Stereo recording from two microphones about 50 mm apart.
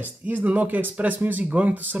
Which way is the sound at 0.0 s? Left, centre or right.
Right.